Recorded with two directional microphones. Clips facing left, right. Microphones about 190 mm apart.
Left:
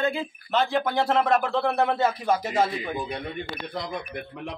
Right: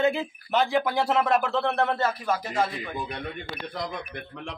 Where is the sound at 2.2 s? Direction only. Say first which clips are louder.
Left 3 dB; 20° left (ahead or behind).